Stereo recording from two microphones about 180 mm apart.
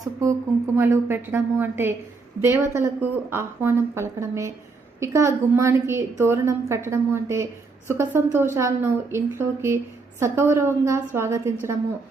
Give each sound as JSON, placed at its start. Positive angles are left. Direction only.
{"t": 0.0, "sound": "a woman's voice", "side_deg": -20}